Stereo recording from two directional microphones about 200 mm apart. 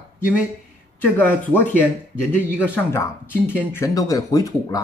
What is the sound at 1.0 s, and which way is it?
Speech, 10° left (ahead or behind).